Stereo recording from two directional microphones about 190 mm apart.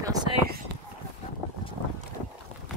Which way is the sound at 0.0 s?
20° right (ahead or behind).